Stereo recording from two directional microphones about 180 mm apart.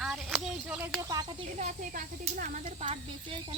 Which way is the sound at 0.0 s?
Centre (ahead or behind).